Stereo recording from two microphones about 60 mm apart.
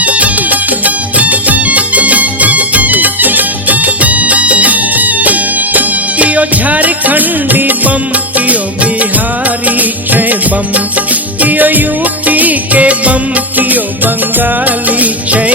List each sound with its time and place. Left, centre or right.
0.0 s music: right